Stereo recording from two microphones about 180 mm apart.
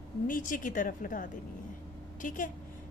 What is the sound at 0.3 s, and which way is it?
A woman's voice, 45° left (ahead or behind).